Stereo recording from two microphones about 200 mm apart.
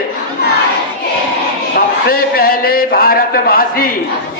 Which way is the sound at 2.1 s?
50° left (ahead or behind).